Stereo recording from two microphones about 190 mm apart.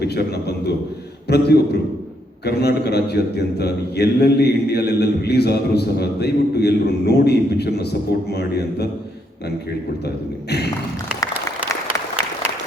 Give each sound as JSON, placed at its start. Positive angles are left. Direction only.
{"t": 0.0, "sound": "a man's voice", "side_deg": 60}